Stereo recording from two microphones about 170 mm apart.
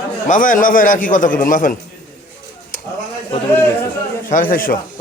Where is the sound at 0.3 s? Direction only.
50° left (ahead or behind).